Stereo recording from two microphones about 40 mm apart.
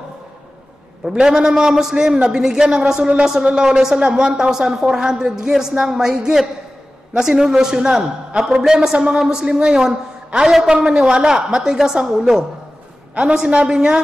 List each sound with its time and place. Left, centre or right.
1.1 s a man's voice: centre
10.4 s a man's voice: centre